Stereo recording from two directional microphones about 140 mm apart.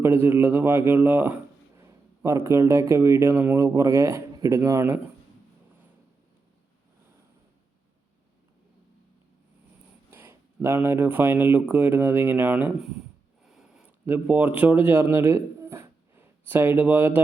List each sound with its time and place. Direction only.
0.0 s speech: 15° right (ahead or behind)
10.1 s speech: 15° right (ahead or behind)
13.4 s a sound: 5° right (ahead or behind)